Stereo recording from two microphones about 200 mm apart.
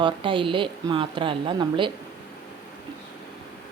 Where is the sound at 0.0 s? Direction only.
25° right (ahead or behind).